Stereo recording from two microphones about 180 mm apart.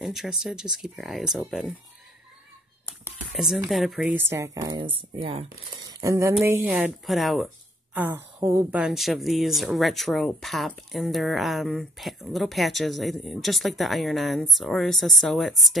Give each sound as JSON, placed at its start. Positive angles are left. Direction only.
{"t": 0.0, "sound": "speech", "side_deg": 0}
{"t": 3.3, "sound": "speech", "side_deg": 0}
{"t": 4.2, "sound": "speech", "side_deg": -15}
{"t": 5.9, "sound": "speech", "side_deg": -15}